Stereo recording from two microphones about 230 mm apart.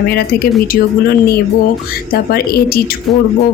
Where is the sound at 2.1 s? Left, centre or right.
Left.